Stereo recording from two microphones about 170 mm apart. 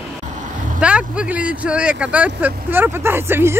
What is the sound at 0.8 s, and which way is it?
Speech, 5° right (ahead or behind).